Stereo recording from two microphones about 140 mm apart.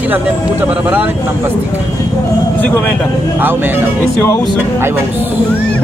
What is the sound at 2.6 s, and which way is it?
Speech, 10° left (ahead or behind).